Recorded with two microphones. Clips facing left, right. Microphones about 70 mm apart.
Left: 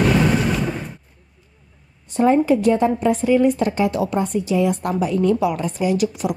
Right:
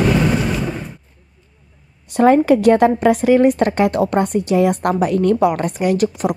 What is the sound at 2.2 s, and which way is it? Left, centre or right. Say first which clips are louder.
A woman's voice: right 4 dB; right.